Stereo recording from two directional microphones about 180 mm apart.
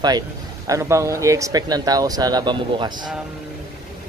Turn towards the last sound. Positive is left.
turn(degrees=-25)  # may be behind; listen again after turning